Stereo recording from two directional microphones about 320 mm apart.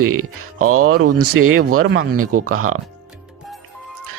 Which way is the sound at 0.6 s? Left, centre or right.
Right.